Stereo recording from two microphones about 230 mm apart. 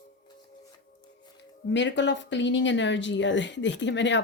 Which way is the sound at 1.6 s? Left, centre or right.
Left.